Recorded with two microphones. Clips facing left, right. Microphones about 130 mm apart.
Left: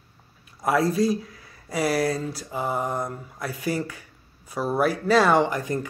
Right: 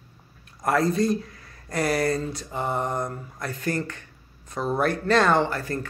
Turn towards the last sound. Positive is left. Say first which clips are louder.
# left 2 dB
turn(degrees=15)  # may be behind; listen again after turning